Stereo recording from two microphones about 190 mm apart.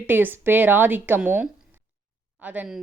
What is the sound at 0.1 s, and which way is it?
Speech, 10° right (ahead or behind).